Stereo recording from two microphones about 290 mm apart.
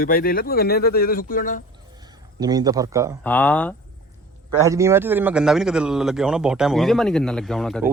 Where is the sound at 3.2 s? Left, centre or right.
Centre.